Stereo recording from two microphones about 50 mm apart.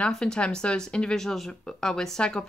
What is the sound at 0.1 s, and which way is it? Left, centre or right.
Speech, centre.